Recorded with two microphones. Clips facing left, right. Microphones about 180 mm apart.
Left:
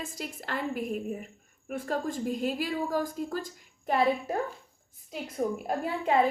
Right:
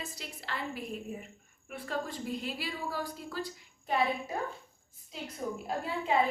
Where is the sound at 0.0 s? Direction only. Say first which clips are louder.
Left 6 dB; 50° left (ahead or behind).